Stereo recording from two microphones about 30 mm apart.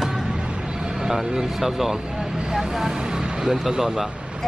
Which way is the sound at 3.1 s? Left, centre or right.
Right.